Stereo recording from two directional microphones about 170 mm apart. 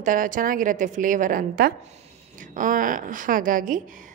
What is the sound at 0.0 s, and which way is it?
A woman's voice, 50° right (ahead or behind).